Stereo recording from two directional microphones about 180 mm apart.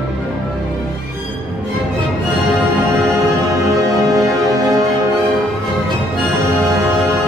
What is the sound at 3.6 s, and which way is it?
Music, 20° right (ahead or behind).